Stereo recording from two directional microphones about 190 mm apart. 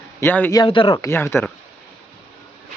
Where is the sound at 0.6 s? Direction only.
25° left (ahead or behind).